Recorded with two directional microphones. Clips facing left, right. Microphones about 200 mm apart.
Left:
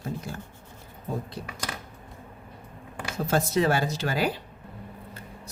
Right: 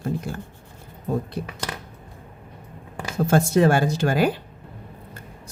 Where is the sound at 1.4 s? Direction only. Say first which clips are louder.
Right 7 dB; 55° right (ahead or behind).